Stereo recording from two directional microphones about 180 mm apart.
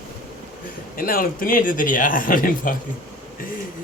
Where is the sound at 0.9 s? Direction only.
50° left (ahead or behind).